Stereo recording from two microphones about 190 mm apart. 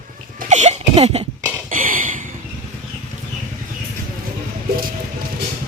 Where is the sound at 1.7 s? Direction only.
45° right (ahead or behind).